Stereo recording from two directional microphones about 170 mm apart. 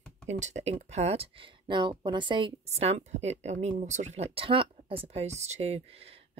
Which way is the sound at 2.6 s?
40° right (ahead or behind).